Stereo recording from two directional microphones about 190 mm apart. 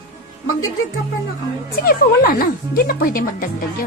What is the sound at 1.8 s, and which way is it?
Speech, 50° left (ahead or behind).